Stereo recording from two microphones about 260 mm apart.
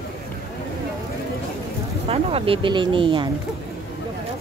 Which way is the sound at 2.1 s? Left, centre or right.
Right.